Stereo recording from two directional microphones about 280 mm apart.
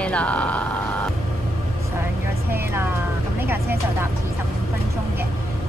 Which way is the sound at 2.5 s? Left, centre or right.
Centre.